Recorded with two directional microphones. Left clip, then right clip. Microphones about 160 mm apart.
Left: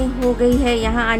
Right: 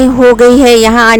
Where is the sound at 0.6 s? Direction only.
90° right.